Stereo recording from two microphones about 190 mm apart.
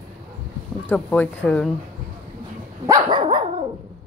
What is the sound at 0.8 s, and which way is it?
Speech, 10° left (ahead or behind).